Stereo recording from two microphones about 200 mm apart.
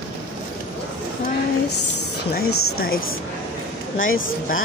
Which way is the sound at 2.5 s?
90° left.